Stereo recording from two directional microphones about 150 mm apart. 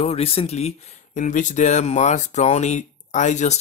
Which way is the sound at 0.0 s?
40° left (ahead or behind).